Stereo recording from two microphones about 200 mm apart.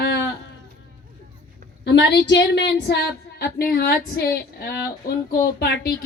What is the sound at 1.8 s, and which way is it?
A woman's voice, 60° left (ahead or behind).